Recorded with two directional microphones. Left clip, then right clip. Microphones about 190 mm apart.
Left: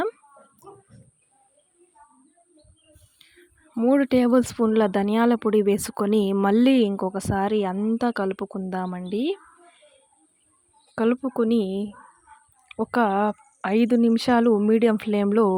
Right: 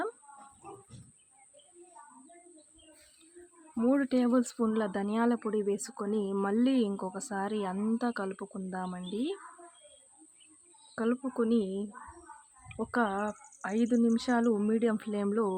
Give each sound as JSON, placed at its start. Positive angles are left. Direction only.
{"t": 3.8, "sound": "a woman's voice", "side_deg": 40}
{"t": 10.9, "sound": "a woman's voice", "side_deg": 40}